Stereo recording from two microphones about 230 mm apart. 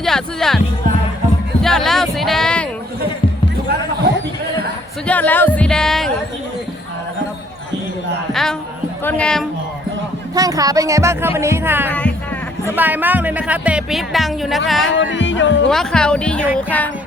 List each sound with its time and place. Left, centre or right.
0.0 s speech: centre
1.6 s music: centre
5.0 s speech: centre
8.3 s speech: centre
10.3 s speech: centre
11.9 s speech: centre
12.7 s speech: centre
14.8 s speech: left
15.7 s speech: centre